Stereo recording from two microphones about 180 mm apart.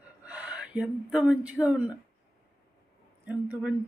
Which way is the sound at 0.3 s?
5° right (ahead or behind).